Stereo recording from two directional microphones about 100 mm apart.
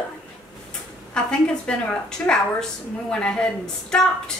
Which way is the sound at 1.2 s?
10° left (ahead or behind).